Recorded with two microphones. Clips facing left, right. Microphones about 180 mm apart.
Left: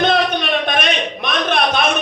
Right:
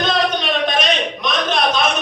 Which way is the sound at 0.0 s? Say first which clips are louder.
Left 2 dB; 60° left (ahead or behind).